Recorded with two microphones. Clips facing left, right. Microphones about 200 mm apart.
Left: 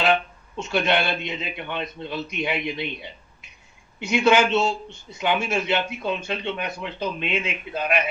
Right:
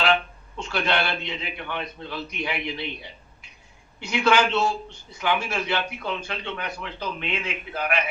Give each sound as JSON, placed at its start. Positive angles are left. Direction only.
{"t": 0.0, "sound": "a man's voice", "side_deg": 20}